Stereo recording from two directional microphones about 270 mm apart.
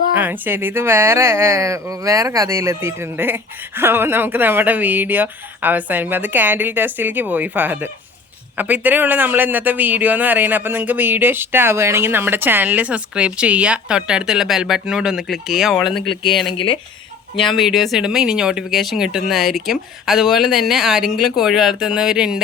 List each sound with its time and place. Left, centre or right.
0.1 s speech: centre
16.6 s speech: centre
17.4 s speech: centre